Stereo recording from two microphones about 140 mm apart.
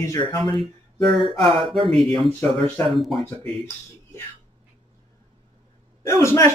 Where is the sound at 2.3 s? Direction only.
15° left (ahead or behind).